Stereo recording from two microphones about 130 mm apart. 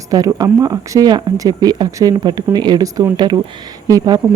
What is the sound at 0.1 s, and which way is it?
Speech, 30° right (ahead or behind).